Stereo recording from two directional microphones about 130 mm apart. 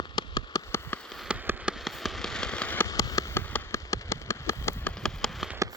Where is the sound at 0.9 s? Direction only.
15° left (ahead or behind).